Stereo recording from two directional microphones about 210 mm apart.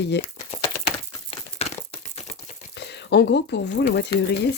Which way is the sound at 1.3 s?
30° left (ahead or behind).